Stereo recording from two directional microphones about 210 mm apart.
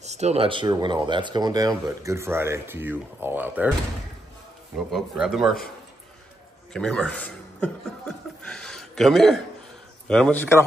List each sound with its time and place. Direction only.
0.0 s speech: 30° right (ahead or behind); by 3.7 s 10° right (ahead or behind)
4.7 s speech: centre (ahead or behind)
6.7 s a man's voice: 5° left (ahead or behind)
8.5 s a sound: 5° left (ahead or behind)
10.0 s speech: 5° left (ahead or behind)